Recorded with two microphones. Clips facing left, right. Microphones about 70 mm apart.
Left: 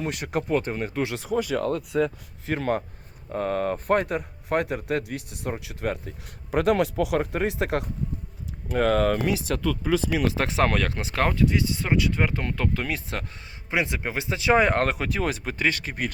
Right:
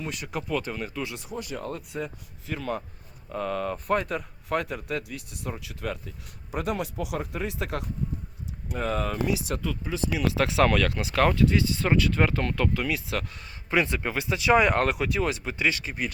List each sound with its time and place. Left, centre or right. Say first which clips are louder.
0.1 s speech: left 5 dB; left
0.4 s speech: left 4 dB; left
1.5 s speech: left 7 dB; left
2.5 s speech: left 6 dB; left
3.3 s speech: left 4 dB; left
6.5 s speech: left 8 dB; left
7.1 s speech: left 7 dB; left
7.6 s speech: left 6 dB; left
8.8 s speech: left 7 dB; left
10.2 s speech: even; left; by 12.7 s centre
12.7 s speech: right 1 dB; left
13.7 s speech: right 1 dB; centre; by 16.1 s left